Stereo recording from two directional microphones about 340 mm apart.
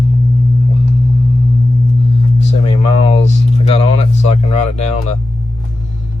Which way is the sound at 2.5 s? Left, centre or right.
Centre.